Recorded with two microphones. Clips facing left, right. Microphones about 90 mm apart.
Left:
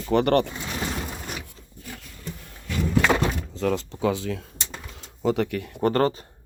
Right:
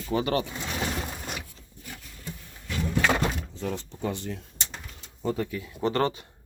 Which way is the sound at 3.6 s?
90° left.